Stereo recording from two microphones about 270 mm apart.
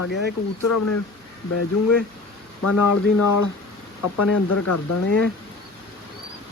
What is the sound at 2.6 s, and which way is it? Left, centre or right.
Speech, left.